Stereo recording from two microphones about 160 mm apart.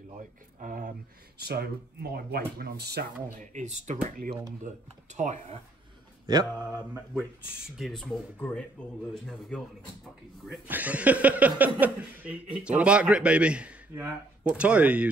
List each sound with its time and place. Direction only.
0.6 s speech: 55° right (ahead or behind)
1.4 s speech: 90° right
3.3 s speech: 45° right (ahead or behind)
6.9 s speech: 5° right (ahead or behind)
10.7 s speech: 10° right (ahead or behind)